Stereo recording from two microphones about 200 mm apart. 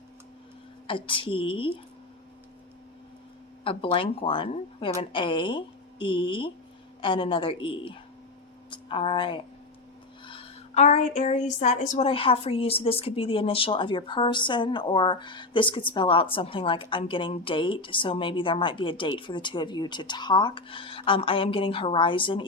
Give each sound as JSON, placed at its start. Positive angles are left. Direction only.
{"t": 0.9, "sound": "a woman's voice", "side_deg": 25}
{"t": 3.6, "sound": "a woman's voice", "side_deg": 25}